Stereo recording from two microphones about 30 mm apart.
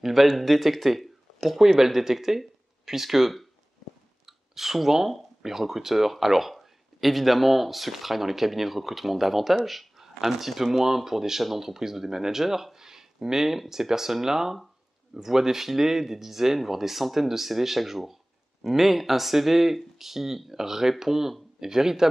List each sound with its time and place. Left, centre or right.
0.0 s speech: centre
1.8 s speech: centre